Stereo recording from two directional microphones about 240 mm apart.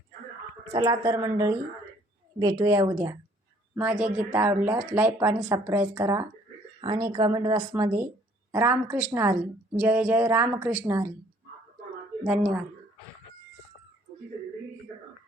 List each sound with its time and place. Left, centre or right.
0.7 s speech: centre
2.4 s speech: centre
12.2 s a woman's voice: centre